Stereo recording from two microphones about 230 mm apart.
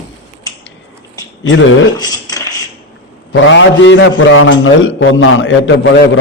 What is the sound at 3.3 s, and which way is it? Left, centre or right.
A man's voice, left.